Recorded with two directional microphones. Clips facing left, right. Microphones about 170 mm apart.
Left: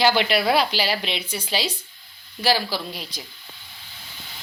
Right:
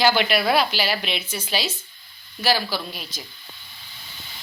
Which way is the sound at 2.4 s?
25° left (ahead or behind).